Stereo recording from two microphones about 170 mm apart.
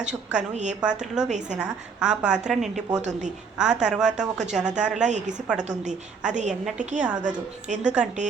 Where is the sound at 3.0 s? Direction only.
45° right (ahead or behind).